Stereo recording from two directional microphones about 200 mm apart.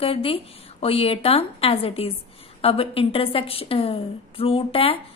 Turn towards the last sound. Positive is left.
turn(degrees=30)  # may be behind; listen again after turning